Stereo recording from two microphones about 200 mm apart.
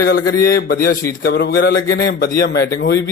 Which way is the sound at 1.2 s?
60° left (ahead or behind).